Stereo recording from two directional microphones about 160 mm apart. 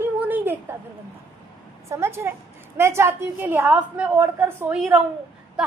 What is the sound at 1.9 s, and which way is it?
A woman's voice, 15° right (ahead or behind).